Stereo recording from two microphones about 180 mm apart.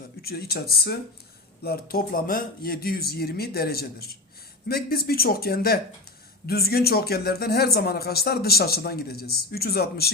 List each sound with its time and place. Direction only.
0.2 s speech: 60° left (ahead or behind)